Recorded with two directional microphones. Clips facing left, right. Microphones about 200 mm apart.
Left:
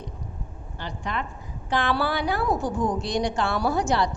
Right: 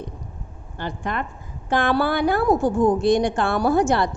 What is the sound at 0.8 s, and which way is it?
A woman's voice, 50° right (ahead or behind).